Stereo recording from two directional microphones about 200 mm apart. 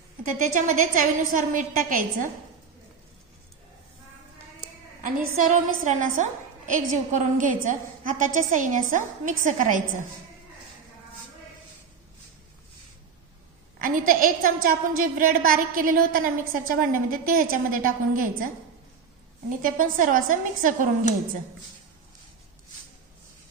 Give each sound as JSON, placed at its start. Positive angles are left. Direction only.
{"t": 0.4, "sound": "a woman's voice", "side_deg": -40}
{"t": 4.6, "sound": "a sound", "side_deg": -40}
{"t": 5.9, "sound": "a woman's voice", "side_deg": -40}
{"t": 13.7, "sound": "a woman's voice", "side_deg": -45}
{"t": 19.6, "sound": "a woman's voice", "side_deg": -40}